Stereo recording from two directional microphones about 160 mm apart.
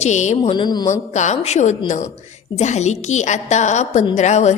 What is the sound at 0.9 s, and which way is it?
A woman's voice, 45° left (ahead or behind).